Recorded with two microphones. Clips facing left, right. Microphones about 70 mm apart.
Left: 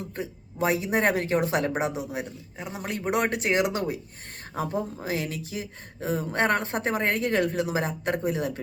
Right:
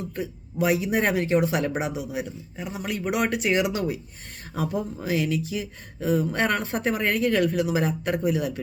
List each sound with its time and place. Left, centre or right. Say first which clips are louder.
0.2 s speech: right 2 dB; left